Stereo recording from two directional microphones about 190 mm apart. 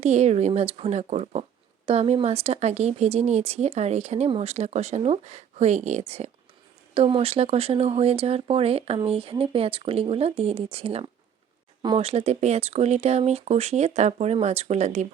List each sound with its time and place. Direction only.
0.0 s speech: 35° right (ahead or behind)